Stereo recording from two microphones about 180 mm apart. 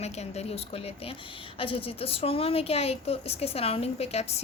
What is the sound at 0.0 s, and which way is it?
A woman's voice, 35° left (ahead or behind).